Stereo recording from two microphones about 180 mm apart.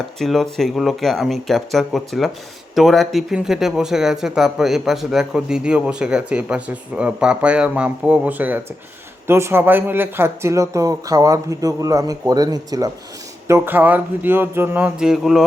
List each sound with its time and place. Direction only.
0.2 s speech: centre (ahead or behind); by 12.9 s 20° right (ahead or behind)
13.5 s speech: 10° right (ahead or behind)